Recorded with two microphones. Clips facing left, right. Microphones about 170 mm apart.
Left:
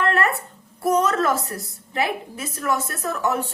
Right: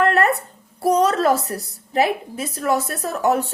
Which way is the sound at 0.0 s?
35° right (ahead or behind).